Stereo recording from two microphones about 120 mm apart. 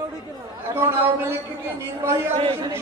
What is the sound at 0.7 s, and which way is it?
Speech, 20° right (ahead or behind).